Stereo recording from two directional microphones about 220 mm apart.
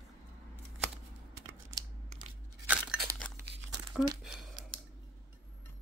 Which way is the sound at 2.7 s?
Centre (ahead or behind).